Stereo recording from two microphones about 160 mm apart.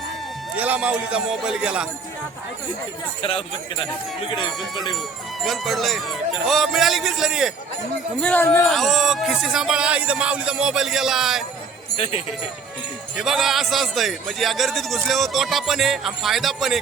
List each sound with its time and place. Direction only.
0.5 s a man's voice: 10° right (ahead or behind)
3.2 s speech: 35° left (ahead or behind)
5.4 s a man's voice: centre (ahead or behind)
8.2 s speech: 10° left (ahead or behind)
8.6 s a man's voice: centre (ahead or behind)
11.9 s speech: 40° left (ahead or behind)
13.1 s a man's voice: centre (ahead or behind)